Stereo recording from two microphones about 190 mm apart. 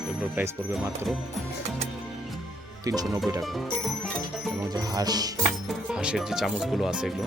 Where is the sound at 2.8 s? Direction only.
20° right (ahead or behind).